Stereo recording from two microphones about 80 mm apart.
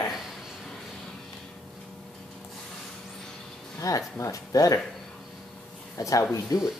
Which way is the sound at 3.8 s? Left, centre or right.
Left.